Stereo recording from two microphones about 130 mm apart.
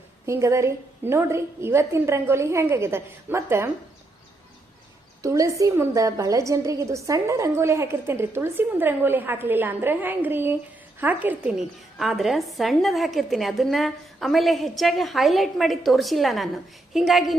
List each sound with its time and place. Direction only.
0.3 s a woman's voice: 20° right (ahead or behind)
5.2 s a woman's voice: 25° right (ahead or behind); by 17.3 s centre (ahead or behind)